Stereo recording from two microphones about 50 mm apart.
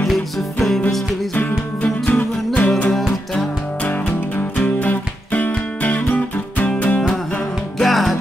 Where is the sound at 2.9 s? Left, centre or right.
Centre.